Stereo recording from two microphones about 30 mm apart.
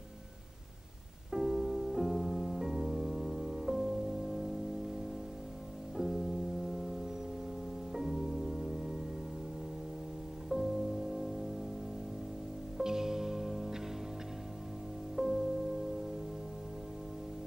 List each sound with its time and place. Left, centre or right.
1.3 s music: centre
5.9 s music: centre
10.5 s music: centre
12.7 s music: centre
15.1 s music: centre